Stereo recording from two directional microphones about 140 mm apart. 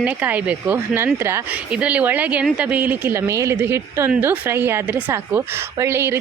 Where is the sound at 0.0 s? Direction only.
10° right (ahead or behind).